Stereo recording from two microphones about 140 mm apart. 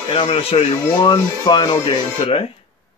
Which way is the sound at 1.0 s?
30° left (ahead or behind).